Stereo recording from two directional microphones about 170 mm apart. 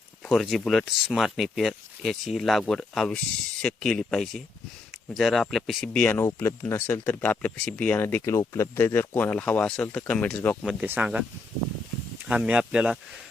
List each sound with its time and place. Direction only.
0.3 s speech: centre (ahead or behind)
6.1 s speech: 15° left (ahead or behind)
10.7 s speech: 10° right (ahead or behind)
12.3 s speech: 5° right (ahead or behind)